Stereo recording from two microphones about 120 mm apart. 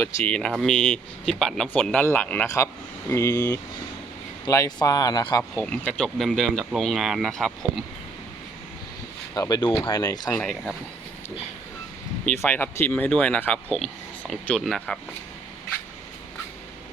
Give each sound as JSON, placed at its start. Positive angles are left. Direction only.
{"t": 0.0, "sound": "speech", "side_deg": 10}
{"t": 5.4, "sound": "speech", "side_deg": 10}
{"t": 9.3, "sound": "speech", "side_deg": 30}
{"t": 9.7, "sound": "speech", "side_deg": 25}
{"t": 12.2, "sound": "speech", "side_deg": 15}